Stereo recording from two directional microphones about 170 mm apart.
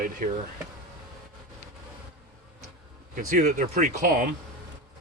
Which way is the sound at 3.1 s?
50° right (ahead or behind).